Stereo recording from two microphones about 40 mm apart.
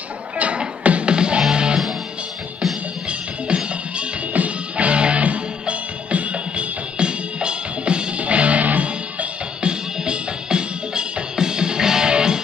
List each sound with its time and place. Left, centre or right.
0.8 s music: right
1.1 s music: right
3.1 s music: right
4.3 s music: right; by 12.4 s centre